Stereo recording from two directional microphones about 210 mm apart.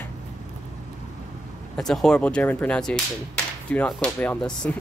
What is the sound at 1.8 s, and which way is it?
Speech, centre (ahead or behind).